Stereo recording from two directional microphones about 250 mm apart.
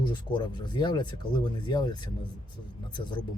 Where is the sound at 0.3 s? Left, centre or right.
Centre.